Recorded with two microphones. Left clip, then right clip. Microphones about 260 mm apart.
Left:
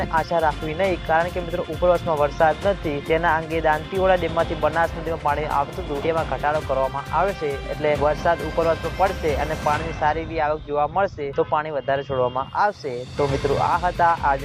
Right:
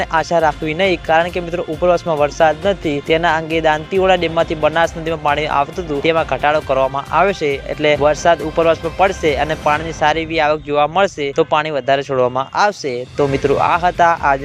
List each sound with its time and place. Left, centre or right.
0.0 s speech: right